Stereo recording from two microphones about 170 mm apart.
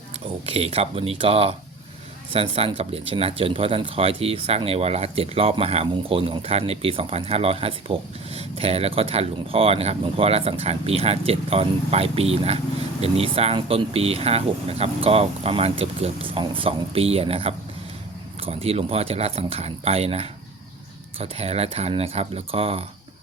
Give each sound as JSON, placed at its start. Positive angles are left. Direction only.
{"t": 0.4, "sound": "speech", "side_deg": -35}